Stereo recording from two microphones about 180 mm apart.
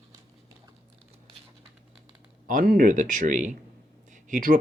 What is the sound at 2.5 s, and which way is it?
Speech, 50° right (ahead or behind).